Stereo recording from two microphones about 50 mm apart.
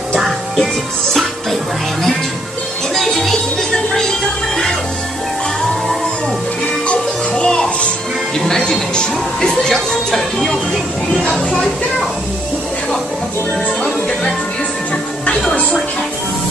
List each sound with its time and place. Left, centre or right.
2.9 s music: centre
6.9 s music: centre
8.4 s speech: centre
10.4 s a sound: centre